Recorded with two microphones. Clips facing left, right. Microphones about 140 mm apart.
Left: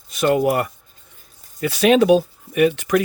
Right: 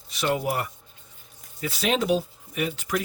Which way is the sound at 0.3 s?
60° left (ahead or behind).